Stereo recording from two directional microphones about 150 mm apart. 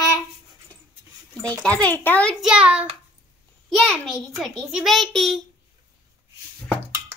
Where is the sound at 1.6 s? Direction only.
10° left (ahead or behind).